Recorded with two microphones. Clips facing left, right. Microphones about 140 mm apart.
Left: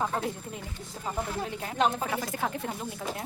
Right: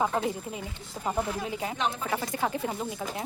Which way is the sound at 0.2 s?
Centre (ahead or behind).